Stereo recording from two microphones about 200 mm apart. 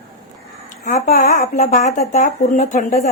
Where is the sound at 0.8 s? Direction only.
40° left (ahead or behind).